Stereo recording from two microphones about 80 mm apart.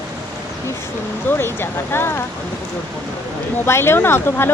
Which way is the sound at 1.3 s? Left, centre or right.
Left.